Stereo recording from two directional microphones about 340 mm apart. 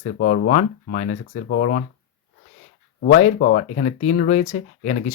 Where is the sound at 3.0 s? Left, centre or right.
Left.